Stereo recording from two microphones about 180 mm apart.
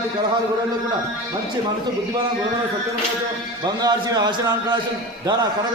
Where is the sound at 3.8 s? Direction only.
20° right (ahead or behind).